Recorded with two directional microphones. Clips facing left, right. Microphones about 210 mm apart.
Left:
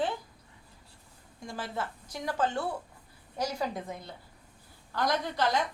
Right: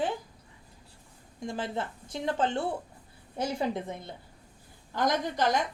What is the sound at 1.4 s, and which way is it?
A woman's voice, 20° right (ahead or behind).